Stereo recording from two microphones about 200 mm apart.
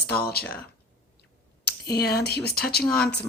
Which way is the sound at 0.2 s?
50° left (ahead or behind).